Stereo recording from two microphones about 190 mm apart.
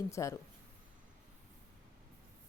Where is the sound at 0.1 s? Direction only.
15° left (ahead or behind).